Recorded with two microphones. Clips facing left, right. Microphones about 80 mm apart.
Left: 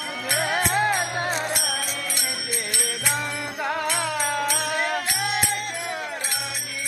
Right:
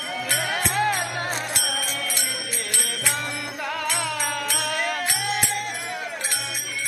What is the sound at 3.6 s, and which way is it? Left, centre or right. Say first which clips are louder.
Music: left 2 dB; left.